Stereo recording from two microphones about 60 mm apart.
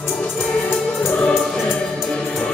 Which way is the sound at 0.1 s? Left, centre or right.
Centre.